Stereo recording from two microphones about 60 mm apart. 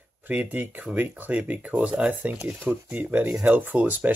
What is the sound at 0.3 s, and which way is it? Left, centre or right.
Speech, right.